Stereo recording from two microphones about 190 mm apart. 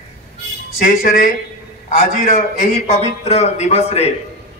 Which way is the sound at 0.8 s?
45° left (ahead or behind).